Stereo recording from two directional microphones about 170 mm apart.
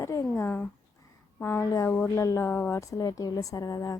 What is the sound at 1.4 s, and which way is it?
A woman's voice, 15° left (ahead or behind).